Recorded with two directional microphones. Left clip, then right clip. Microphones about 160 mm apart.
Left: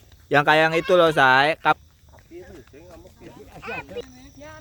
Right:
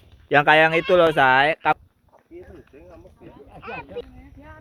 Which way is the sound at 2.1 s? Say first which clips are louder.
Left 1 dB; 40° right (ahead or behind).